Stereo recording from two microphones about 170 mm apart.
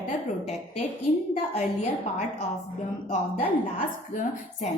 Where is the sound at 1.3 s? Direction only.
45° left (ahead or behind).